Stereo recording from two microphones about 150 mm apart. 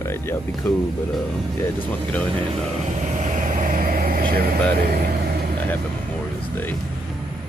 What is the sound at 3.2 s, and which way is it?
Vehicle, 55° right (ahead or behind).